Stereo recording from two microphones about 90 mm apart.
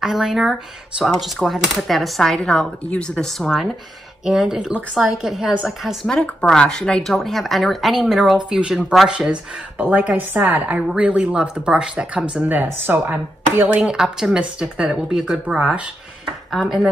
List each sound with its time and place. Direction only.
0.0 s speech: 5° right (ahead or behind)
6.0 s speech: 10° left (ahead or behind); by 13.7 s 25° right (ahead or behind)
13.7 s speech: 10° right (ahead or behind)
16.4 s speech: centre (ahead or behind)